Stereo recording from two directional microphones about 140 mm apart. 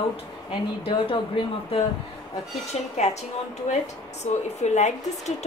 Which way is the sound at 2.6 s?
55° left (ahead or behind).